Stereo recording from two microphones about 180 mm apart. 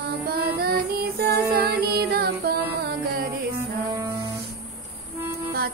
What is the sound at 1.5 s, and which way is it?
Music, 60° right (ahead or behind).